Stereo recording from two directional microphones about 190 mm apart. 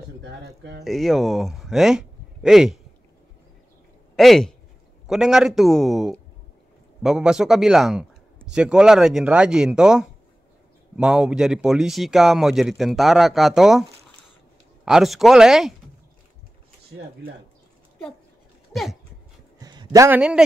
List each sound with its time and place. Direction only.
0.2 s speech: 65° right (ahead or behind)
0.8 s speech: centre (ahead or behind)
4.2 s a man's voice: centre (ahead or behind)
14.9 s a man's voice: centre (ahead or behind)
18.7 s dog: centre (ahead or behind)
19.6 s speech: 20° right (ahead or behind)